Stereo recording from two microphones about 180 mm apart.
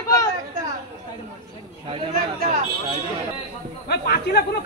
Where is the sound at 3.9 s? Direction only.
60° left (ahead or behind).